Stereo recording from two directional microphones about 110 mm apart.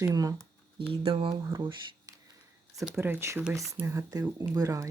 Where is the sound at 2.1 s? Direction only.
30° right (ahead or behind).